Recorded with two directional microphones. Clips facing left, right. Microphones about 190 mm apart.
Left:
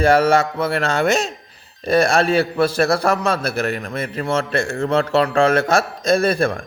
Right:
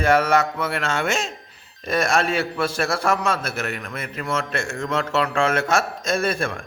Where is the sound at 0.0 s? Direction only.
30° left (ahead or behind).